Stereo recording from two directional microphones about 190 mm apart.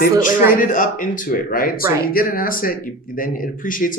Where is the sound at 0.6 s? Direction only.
45° left (ahead or behind).